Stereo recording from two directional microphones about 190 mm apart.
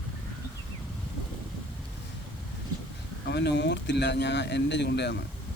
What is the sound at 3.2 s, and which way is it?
Speech, 65° left (ahead or behind).